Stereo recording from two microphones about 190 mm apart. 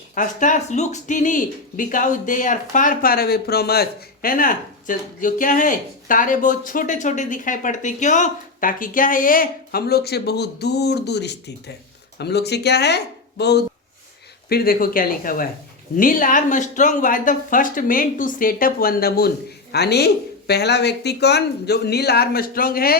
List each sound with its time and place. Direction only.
0.1 s speech: 40° left (ahead or behind)